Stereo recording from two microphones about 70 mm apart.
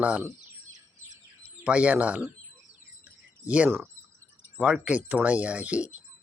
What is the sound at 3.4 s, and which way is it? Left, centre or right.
Speech, centre.